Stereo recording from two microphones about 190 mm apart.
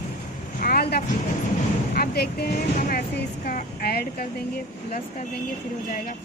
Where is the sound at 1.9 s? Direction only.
55° left (ahead or behind).